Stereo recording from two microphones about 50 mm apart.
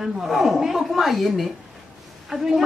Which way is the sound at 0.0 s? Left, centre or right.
Centre.